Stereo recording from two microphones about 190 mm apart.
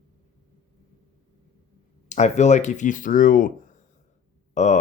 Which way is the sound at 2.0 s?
35° left (ahead or behind).